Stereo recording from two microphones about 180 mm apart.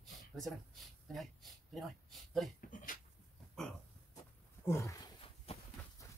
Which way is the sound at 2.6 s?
50° left (ahead or behind).